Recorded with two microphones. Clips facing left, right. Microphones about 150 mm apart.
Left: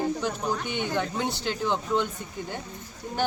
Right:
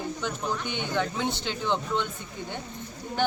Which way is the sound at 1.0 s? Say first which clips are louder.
Even; 5° left (ahead or behind).